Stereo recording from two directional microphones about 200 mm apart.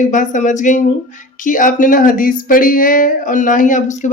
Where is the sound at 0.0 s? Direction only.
40° left (ahead or behind).